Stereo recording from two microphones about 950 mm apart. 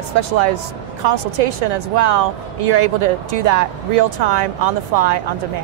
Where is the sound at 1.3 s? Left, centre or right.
Right.